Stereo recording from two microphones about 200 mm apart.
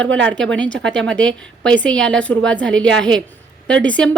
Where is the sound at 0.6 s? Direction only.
65° right (ahead or behind).